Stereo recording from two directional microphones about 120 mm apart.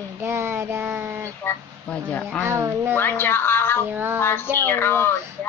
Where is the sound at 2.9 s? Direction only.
15° left (ahead or behind).